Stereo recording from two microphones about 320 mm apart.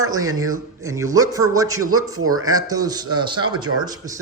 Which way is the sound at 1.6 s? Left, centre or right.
Right.